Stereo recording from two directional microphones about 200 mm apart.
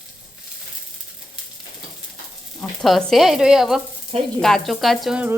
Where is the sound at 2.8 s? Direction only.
Centre (ahead or behind).